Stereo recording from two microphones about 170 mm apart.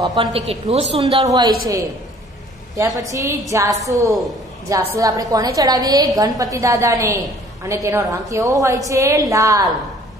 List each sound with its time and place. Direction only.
0.0 s a woman's voice: 30° right (ahead or behind)
1.2 s a woman's voice: 20° right (ahead or behind)
3.0 s a woman's voice: 20° right (ahead or behind)